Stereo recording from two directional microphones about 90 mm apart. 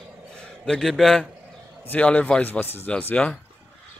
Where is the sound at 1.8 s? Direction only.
15° left (ahead or behind).